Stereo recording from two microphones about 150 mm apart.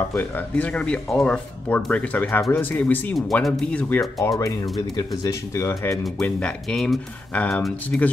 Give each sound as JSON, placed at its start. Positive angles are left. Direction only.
{"t": 0.1, "sound": "speech", "side_deg": 15}
{"t": 6.0, "sound": "speech", "side_deg": 5}